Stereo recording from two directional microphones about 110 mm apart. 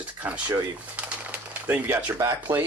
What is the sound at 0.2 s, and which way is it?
Speech, 15° right (ahead or behind).